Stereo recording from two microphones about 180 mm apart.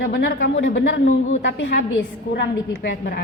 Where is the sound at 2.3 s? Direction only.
65° left (ahead or behind).